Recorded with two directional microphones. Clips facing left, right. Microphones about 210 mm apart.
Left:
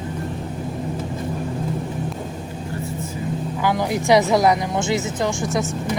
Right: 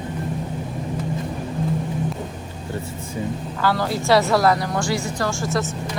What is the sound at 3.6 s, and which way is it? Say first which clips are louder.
A woman's voice: even; 15° left (ahead or behind).